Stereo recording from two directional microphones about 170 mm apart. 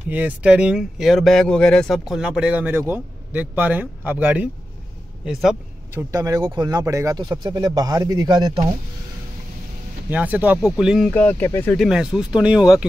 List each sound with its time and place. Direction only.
0.1 s speech: 10° right (ahead or behind)
6.1 s speech: 20° right (ahead or behind)
10.0 s speech: 10° right (ahead or behind)
11.1 s speech: 10° left (ahead or behind)
11.7 s speech: centre (ahead or behind)